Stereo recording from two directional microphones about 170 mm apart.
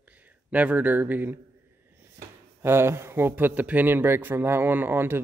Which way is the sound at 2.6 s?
15° right (ahead or behind).